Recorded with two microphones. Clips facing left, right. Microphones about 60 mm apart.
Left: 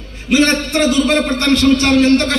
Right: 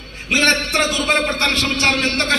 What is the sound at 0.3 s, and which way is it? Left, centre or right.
A man's voice, right.